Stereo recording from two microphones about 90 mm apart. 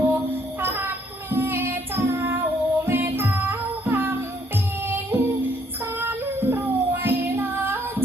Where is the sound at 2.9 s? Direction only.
25° right (ahead or behind).